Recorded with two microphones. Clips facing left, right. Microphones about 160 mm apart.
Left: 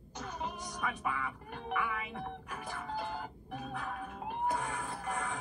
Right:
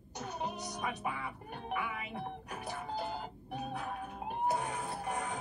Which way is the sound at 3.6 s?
40° right (ahead or behind).